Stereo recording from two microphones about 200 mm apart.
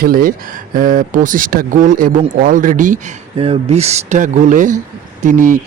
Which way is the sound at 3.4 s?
30° right (ahead or behind).